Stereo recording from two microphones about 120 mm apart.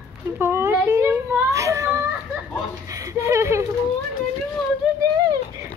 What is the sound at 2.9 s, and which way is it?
Speech, 25° right (ahead or behind).